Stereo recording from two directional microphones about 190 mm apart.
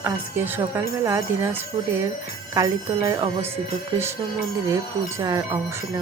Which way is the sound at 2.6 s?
15° right (ahead or behind).